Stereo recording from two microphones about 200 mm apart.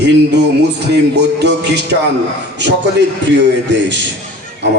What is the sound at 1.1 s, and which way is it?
A man's voice, 55° right (ahead or behind).